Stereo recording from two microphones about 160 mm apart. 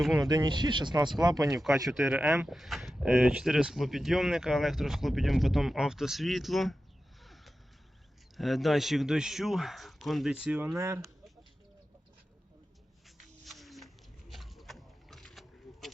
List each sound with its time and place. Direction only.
0.1 s speech: 25° right (ahead or behind)
1.9 s speech: 5° right (ahead or behind)
2.5 s speech: centre (ahead or behind)
8.4 s speech: centre (ahead or behind)
10.8 s speech: 15° right (ahead or behind)
13.1 s a sound: centre (ahead or behind)